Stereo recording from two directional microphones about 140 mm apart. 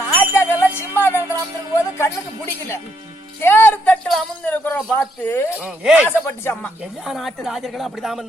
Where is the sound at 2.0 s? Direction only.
20° left (ahead or behind).